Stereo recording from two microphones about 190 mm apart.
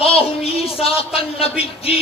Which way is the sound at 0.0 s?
30° left (ahead or behind).